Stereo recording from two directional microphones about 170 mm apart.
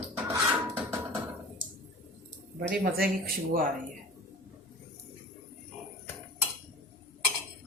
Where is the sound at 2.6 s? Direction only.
60° right (ahead or behind).